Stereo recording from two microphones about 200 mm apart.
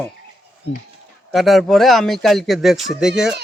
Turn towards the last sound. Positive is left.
turn(degrees=0)  # may be behind; listen again after turning